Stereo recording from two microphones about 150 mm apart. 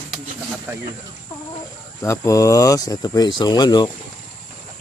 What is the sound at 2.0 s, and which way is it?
Speech, 20° left (ahead or behind).